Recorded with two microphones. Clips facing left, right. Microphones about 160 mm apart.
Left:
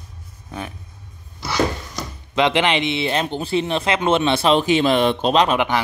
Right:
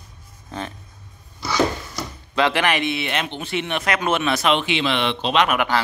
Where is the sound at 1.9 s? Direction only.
20° left (ahead or behind); by 5.5 s 35° left (ahead or behind).